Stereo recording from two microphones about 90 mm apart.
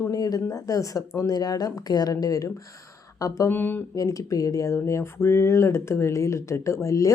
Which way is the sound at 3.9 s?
40° left (ahead or behind).